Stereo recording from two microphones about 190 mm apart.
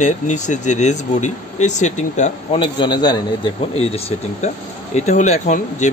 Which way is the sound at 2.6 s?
25° left (ahead or behind).